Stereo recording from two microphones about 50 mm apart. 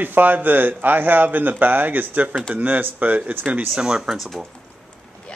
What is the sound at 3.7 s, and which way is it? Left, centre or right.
Speech, centre.